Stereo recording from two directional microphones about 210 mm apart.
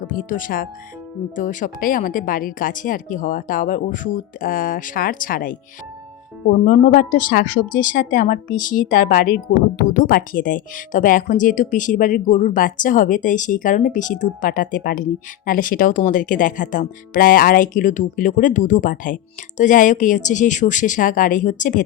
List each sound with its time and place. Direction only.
0.1 s speech: 40° left (ahead or behind)
6.7 s speech: 40° left (ahead or behind)